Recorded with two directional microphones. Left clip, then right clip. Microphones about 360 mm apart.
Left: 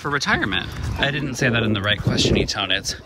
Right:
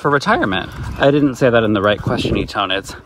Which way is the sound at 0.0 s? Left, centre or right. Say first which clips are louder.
Right 6 dB; centre.